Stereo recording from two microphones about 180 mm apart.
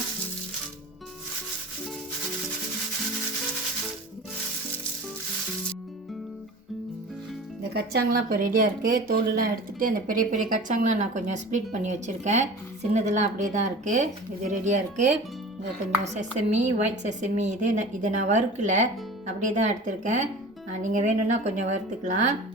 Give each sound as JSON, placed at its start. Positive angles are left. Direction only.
{"t": 7.7, "sound": "a woman's voice", "side_deg": -60}